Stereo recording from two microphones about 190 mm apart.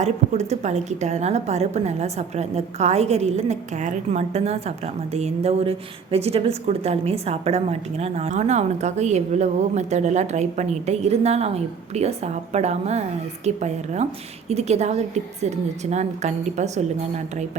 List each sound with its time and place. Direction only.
0.0 s a woman's voice: 35° right (ahead or behind)